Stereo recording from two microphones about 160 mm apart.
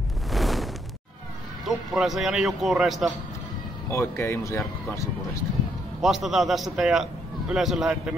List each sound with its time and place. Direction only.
0.3 s a sound: centre (ahead or behind)
1.7 s a man's voice: centre (ahead or behind)
3.9 s speech: 15° left (ahead or behind)
5.9 s a man's voice: centre (ahead or behind)